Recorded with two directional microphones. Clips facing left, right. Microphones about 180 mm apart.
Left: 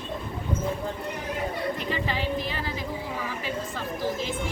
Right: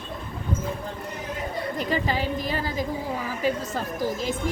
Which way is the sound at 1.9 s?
40° right (ahead or behind).